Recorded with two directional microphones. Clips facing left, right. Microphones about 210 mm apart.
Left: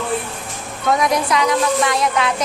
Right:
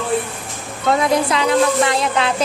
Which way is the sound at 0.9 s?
30° right (ahead or behind).